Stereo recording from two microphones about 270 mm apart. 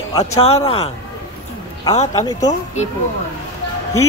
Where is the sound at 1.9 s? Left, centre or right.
Centre.